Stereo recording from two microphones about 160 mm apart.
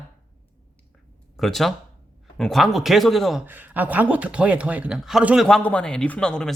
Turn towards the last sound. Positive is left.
turn(degrees=5)  # may be behind; listen again after turning